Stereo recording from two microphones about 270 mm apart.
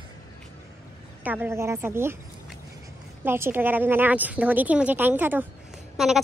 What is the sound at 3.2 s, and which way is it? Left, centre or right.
A woman's voice, centre.